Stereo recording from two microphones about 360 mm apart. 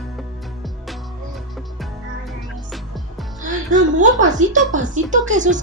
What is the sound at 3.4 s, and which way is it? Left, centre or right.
A woman's voice, right.